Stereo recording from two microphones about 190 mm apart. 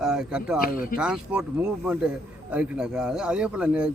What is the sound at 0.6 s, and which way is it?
Speech, 50° left (ahead or behind).